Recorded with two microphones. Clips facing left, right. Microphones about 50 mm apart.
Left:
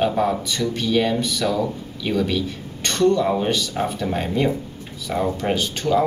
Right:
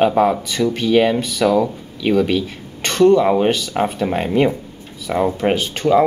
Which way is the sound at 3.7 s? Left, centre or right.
Right.